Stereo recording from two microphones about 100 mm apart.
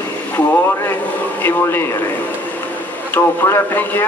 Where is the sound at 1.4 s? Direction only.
20° left (ahead or behind).